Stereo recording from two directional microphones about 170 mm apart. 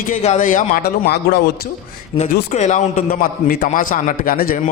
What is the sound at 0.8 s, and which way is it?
Speech, 70° left (ahead or behind).